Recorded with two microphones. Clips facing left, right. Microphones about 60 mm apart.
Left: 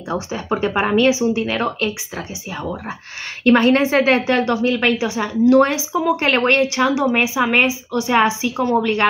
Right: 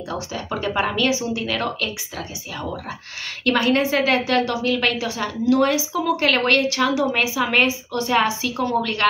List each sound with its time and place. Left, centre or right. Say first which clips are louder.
0.1 s speech: left 6 dB; left
5.4 s speech: left 5 dB; left